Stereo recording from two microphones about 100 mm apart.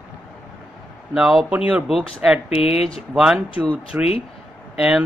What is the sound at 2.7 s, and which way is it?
Speech, 90° left.